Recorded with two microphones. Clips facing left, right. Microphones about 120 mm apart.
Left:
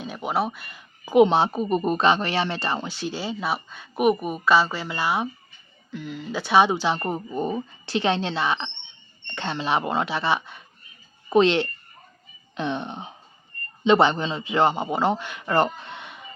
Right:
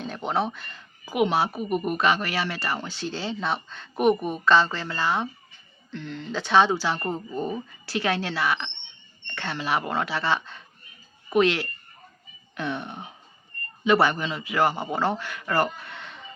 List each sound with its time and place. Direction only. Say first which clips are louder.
0.0 s a sound: left 1 dB; 5° left (ahead or behind)
1.1 s a man's voice: left 6 dB; 25° left (ahead or behind)
11.3 s a man's voice: left 3 dB; 25° left (ahead or behind)